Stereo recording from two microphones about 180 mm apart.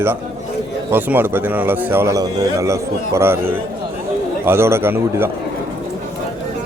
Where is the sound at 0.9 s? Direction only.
10° right (ahead or behind).